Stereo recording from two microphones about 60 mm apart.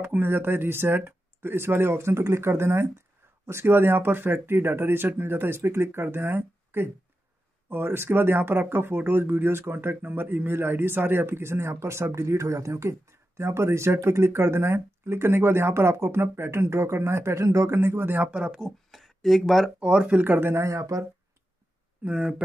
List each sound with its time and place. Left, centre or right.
0.0 s speech: right
18.2 s speech: centre
18.9 s speech: centre
19.8 s speech: centre
20.2 s speech: right
20.5 s speech: right
22.0 s speech: centre